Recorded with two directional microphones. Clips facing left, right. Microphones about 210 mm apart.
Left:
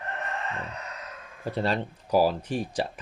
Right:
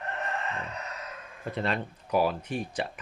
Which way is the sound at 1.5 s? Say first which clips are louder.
Left 3 dB; 35° left (ahead or behind).